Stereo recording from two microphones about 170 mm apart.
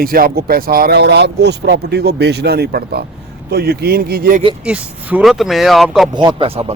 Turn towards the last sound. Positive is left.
turn(degrees=-30)  # may be behind; listen again after turning